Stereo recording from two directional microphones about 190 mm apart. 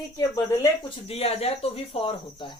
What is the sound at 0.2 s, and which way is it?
Speech, 20° left (ahead or behind).